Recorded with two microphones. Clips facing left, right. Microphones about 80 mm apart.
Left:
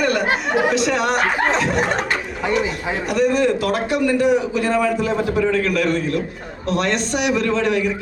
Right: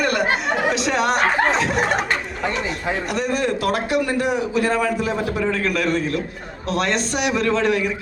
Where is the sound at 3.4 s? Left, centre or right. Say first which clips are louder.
Left 3 dB; centre.